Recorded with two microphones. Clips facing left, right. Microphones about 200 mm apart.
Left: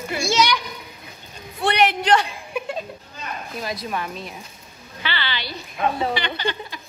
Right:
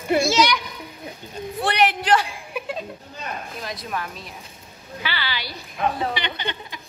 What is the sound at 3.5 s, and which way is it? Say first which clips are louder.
A woman's voice: left 5 dB; centre (ahead or behind).